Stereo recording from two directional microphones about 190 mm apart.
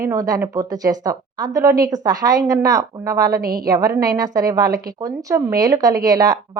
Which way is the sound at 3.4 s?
50° right (ahead or behind).